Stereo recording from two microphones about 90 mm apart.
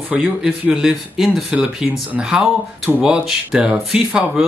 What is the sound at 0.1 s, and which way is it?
Speech, 10° right (ahead or behind).